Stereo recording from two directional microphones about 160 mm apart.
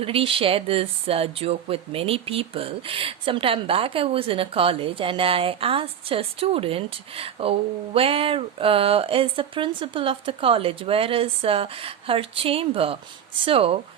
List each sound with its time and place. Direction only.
0.0 s speech: 35° right (ahead or behind)